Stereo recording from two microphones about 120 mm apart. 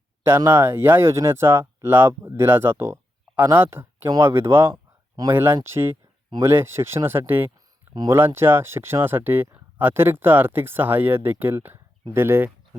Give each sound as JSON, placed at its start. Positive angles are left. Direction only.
{"t": 0.2, "sound": "speech", "side_deg": -20}